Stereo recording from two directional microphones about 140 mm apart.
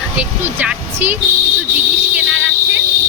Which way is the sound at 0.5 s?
10° right (ahead or behind).